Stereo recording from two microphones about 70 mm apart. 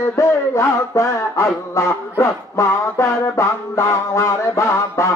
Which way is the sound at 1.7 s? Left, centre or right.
Left.